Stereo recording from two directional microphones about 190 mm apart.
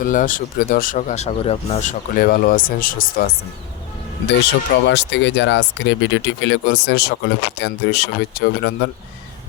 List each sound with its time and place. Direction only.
0.0 s speech: 45° left (ahead or behind)
4.4 s speech: 65° left (ahead or behind)